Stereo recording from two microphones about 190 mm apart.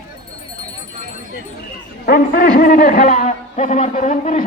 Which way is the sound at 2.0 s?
50° left (ahead or behind).